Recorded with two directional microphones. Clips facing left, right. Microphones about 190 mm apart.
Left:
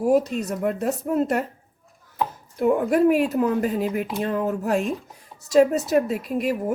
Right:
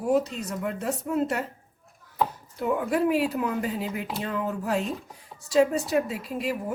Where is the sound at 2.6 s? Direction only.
50° left (ahead or behind).